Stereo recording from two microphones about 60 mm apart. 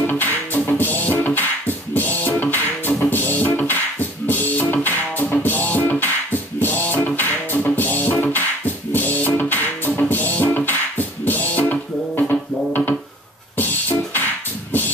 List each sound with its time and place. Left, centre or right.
0.0 s music: left